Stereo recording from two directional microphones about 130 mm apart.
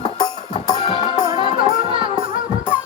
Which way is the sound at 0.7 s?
35° left (ahead or behind).